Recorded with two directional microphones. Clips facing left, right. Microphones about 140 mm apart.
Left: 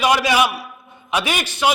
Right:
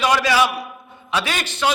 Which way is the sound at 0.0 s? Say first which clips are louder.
Left 1 dB; 15° left (ahead or behind).